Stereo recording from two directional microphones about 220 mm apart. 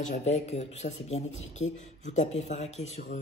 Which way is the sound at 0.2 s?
30° left (ahead or behind).